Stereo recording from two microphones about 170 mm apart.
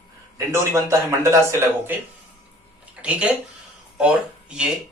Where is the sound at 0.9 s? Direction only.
15° right (ahead or behind).